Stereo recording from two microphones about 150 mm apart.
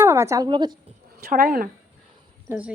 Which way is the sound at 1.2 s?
75° right (ahead or behind).